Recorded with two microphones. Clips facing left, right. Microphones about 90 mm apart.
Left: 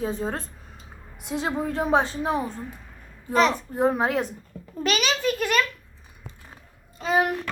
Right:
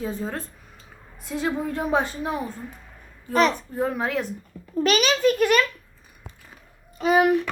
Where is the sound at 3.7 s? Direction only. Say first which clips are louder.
Left 3 dB; 30° left (ahead or behind).